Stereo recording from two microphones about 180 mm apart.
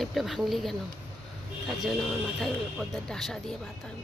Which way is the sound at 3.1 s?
5° left (ahead or behind).